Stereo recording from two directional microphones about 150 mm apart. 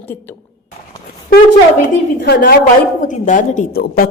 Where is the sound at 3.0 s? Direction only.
55° left (ahead or behind).